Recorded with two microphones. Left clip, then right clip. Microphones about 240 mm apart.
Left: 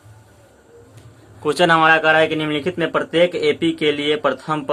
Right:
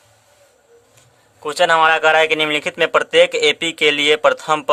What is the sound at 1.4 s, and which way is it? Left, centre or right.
Speech, right.